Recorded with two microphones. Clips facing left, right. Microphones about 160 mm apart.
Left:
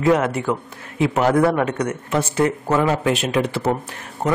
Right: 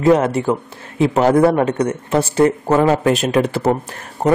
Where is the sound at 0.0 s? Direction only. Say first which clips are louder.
Right 4 dB; 30° right (ahead or behind).